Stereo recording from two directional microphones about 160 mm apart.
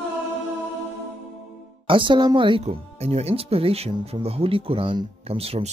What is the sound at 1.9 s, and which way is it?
Speech, 30° right (ahead or behind).